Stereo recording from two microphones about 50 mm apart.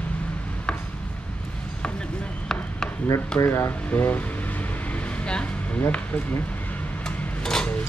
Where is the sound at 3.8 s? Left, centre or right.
Left.